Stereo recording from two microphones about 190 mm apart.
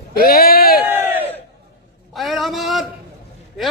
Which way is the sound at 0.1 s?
55° left (ahead or behind).